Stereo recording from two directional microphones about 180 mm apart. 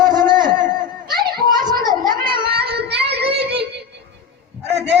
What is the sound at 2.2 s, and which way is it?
Child singing, 25° right (ahead or behind).